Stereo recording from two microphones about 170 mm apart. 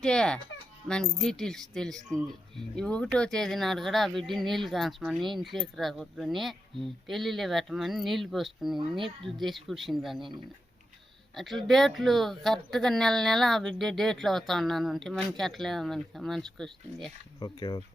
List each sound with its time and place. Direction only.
0.0 s speech: 5° left (ahead or behind)
8.8 s speech: 30° right (ahead or behind)
9.2 s speech: centre (ahead or behind)
11.3 s speech: centre (ahead or behind)
17.4 s speech: 25° left (ahead or behind)